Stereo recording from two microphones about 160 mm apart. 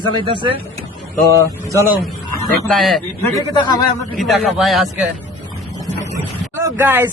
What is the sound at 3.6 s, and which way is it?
Speech, 25° left (ahead or behind).